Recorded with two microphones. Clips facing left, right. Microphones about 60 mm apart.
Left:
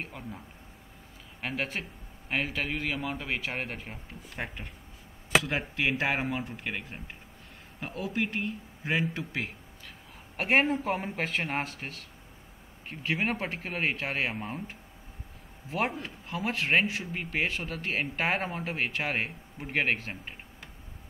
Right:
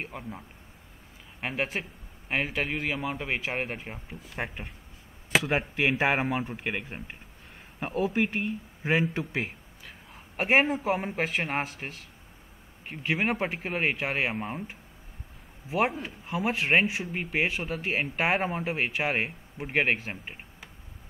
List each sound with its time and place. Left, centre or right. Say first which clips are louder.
0.0 s speech: right 2 dB; centre
1.4 s speech: right 2 dB; centre
9.4 s a man's voice: right 2 dB; centre